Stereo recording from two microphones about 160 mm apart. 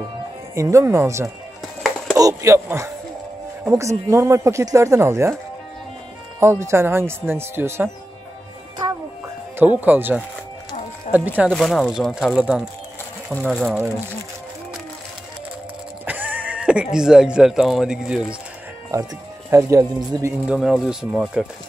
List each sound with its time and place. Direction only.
0.6 s speech: 20° right (ahead or behind)
1.8 s music: centre (ahead or behind)
2.1 s a man's voice: 20° right (ahead or behind)
6.4 s speech: 15° right (ahead or behind)
9.8 s speech: 10° right (ahead or behind)
11.5 s speech: centre (ahead or behind)
16.1 s neigh: 10° right (ahead or behind)
16.9 s speech: 5° right (ahead or behind)
19.5 s a man's voice: 20° right (ahead or behind)
20.4 s speech: centre (ahead or behind)